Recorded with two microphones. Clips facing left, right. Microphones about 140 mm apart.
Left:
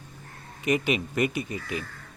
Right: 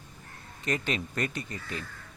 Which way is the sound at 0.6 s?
10° left (ahead or behind).